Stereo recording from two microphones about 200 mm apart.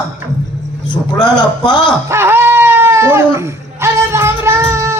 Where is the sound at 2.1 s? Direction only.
10° right (ahead or behind).